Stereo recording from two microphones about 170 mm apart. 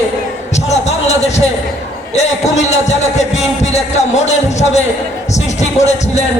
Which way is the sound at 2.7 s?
40° left (ahead or behind).